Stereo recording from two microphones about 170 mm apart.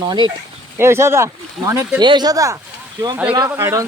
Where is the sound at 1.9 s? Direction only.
25° right (ahead or behind).